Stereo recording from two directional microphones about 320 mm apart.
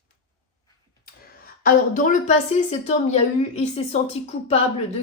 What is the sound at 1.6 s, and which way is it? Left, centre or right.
Speech, left.